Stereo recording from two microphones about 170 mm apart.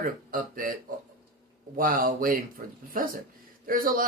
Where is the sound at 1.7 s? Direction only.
55° right (ahead or behind).